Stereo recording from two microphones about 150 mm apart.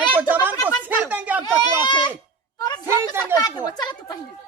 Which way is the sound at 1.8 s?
30° left (ahead or behind).